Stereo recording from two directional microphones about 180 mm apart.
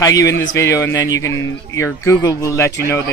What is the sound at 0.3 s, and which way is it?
Speech, 80° left.